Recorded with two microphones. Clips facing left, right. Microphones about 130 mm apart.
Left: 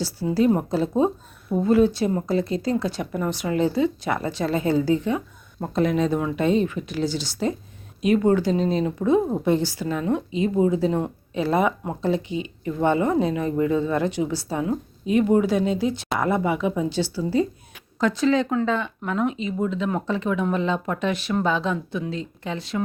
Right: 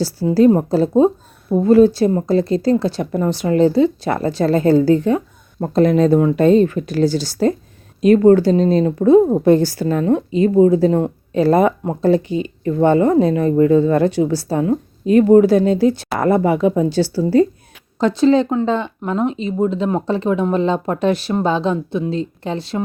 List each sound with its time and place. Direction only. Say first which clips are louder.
0.0 s speech: right 8 dB; 35° right (ahead or behind)
5.5 s speech: right 8 dB; 30° right (ahead or behind)
5.8 s speech: right 9 dB; 40° right (ahead or behind)
18.0 s speech: right 7 dB; 30° right (ahead or behind)